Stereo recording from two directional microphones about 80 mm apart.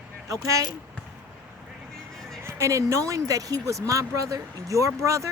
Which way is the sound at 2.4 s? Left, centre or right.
Right.